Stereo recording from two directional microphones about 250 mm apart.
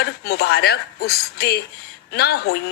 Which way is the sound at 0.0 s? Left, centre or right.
Left.